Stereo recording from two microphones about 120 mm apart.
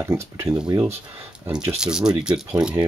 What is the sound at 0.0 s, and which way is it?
Speech, 20° right (ahead or behind).